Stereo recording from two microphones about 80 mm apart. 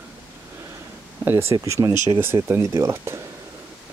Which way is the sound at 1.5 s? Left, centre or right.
Right.